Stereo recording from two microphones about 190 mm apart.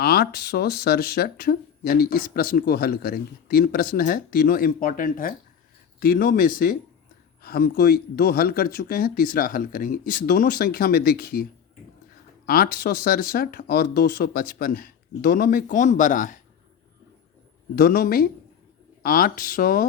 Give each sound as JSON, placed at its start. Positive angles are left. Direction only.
{"t": 0.0, "sound": "speech", "side_deg": 55}
{"t": 12.5, "sound": "speech", "side_deg": 50}
{"t": 17.7, "sound": "speech", "side_deg": 50}